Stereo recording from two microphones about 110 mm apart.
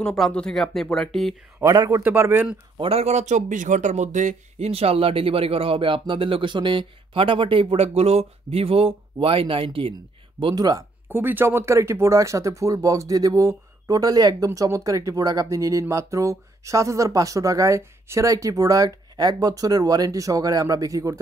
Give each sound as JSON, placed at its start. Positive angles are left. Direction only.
{"t": 0.0, "sound": "speech", "side_deg": 5}
{"t": 1.6, "sound": "a man's voice", "side_deg": -30}
{"t": 2.0, "sound": "a man's voice", "side_deg": -20}
{"t": 2.8, "sound": "speech", "side_deg": -65}
{"t": 10.4, "sound": "speech", "side_deg": -40}
{"t": 11.1, "sound": "speech", "side_deg": -20}